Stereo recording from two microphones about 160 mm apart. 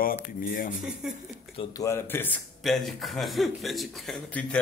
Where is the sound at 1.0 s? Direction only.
5° right (ahead or behind).